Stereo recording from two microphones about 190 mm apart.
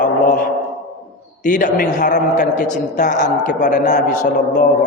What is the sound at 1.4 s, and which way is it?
A man's voice, 45° left (ahead or behind).